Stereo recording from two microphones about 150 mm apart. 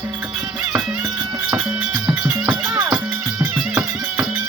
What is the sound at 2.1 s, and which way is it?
Music, 15° right (ahead or behind).